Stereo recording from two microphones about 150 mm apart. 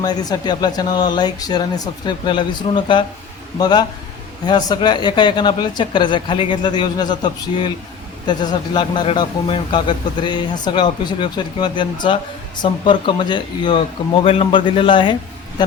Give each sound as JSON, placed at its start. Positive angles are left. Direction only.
{"t": 0.0, "sound": "a man's voice", "side_deg": 25}